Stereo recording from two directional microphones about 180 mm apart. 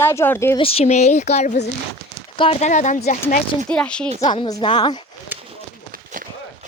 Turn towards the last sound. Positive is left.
turn(degrees=25)  # may be behind; listen again after turning